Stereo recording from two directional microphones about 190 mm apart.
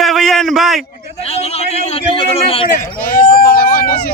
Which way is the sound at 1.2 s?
35° left (ahead or behind).